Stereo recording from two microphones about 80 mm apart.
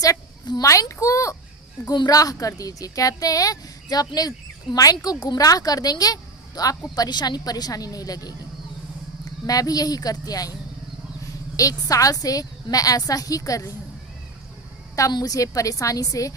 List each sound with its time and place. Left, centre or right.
0.6 s a child's voice: left
9.5 s speech: left
15.1 s speech: left